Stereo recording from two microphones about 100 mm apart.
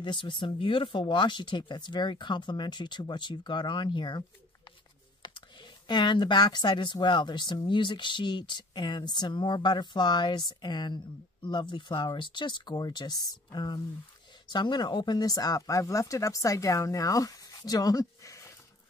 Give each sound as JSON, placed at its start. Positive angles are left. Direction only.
{"t": 0.0, "sound": "speech", "side_deg": 55}
{"t": 5.2, "sound": "speech", "side_deg": 50}